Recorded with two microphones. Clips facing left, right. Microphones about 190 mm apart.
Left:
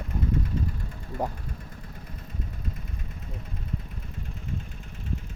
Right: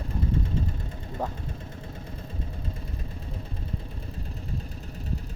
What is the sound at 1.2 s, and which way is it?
Speech, 15° left (ahead or behind).